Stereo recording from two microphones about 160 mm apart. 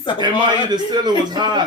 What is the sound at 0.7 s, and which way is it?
Speech, 25° right (ahead or behind).